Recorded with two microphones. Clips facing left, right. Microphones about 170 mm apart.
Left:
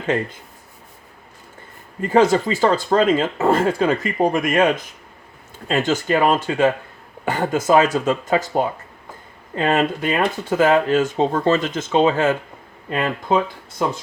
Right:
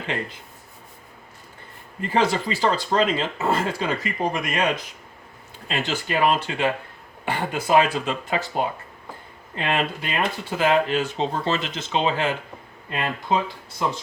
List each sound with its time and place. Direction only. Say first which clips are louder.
2.0 s speech: left 7 dB; 45° left (ahead or behind)